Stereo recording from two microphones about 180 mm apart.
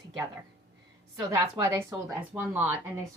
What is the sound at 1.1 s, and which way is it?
A woman's voice, 20° right (ahead or behind).